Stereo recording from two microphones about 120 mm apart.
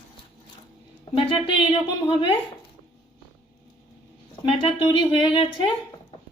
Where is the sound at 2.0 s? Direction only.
45° left (ahead or behind).